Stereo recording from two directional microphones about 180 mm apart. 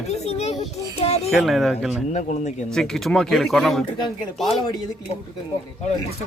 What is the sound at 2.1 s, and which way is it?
Speech, 40° left (ahead or behind).